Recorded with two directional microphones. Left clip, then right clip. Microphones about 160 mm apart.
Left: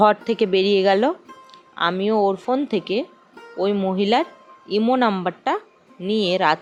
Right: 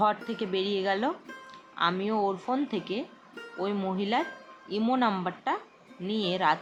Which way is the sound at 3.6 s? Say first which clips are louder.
Left 10 dB; 45° left (ahead or behind).